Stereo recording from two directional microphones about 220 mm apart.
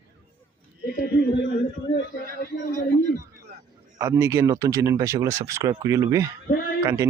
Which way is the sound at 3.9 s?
15° right (ahead or behind).